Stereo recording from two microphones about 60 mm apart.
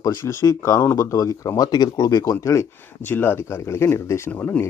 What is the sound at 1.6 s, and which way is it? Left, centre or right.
Speech, left.